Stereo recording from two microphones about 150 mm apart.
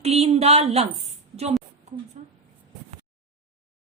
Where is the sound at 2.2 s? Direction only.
55° right (ahead or behind).